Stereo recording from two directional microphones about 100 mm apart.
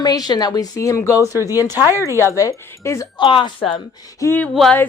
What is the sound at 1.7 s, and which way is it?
Speech, 25° right (ahead or behind).